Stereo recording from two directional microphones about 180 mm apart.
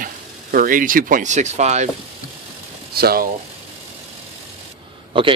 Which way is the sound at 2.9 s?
55° right (ahead or behind).